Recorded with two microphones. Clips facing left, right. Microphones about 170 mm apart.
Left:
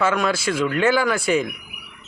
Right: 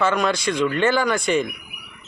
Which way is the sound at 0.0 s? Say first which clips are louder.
Even; 5° left (ahead or behind).